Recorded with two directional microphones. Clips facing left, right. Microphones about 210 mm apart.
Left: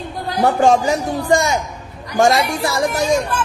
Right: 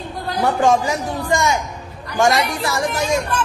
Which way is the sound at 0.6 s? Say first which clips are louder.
Left 2 dB; 35° left (ahead or behind).